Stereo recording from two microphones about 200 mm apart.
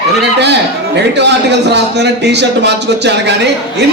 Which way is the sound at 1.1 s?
60° right (ahead or behind).